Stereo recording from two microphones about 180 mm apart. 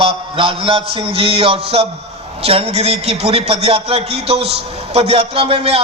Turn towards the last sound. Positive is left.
turn(degrees=-35)  # may be behind; listen again after turning